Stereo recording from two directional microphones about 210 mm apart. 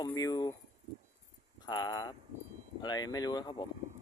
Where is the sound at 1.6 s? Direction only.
20° left (ahead or behind).